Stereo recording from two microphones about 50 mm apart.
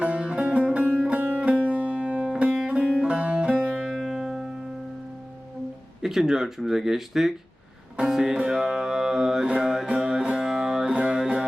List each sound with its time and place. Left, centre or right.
0.0 s sitar: right
1.4 s music: right
6.0 s speech: centre
7.9 s music: centre
9.5 s mantra: centre
9.9 s music: centre